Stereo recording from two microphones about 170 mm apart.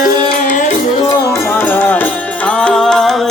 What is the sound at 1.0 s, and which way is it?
Music, 15° left (ahead or behind).